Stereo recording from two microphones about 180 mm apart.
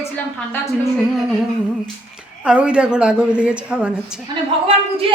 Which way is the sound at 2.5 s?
5° right (ahead or behind).